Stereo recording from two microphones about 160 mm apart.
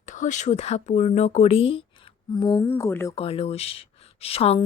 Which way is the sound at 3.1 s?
35° left (ahead or behind).